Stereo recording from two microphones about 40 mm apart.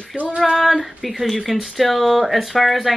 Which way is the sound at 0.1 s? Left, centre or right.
Centre.